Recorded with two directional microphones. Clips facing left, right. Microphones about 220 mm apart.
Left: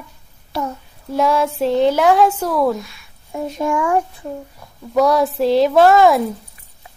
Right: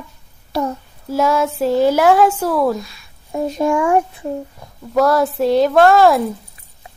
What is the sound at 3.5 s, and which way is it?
Speech, 30° right (ahead or behind).